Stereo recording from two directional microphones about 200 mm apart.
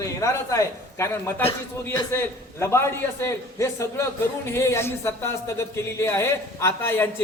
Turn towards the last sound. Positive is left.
turn(degrees=10)  # may be behind; listen again after turning